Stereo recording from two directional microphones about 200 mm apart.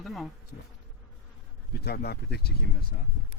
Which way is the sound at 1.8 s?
55° left (ahead or behind).